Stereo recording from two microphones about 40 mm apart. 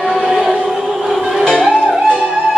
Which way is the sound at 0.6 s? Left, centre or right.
Centre.